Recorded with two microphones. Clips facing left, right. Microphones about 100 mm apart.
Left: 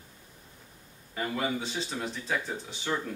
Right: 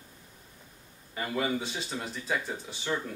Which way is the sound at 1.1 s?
5° right (ahead or behind).